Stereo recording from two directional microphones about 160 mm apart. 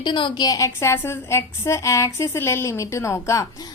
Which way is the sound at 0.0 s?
30° left (ahead or behind).